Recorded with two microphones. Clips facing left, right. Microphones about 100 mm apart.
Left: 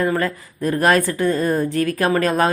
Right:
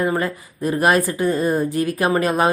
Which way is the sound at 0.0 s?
15° right (ahead or behind).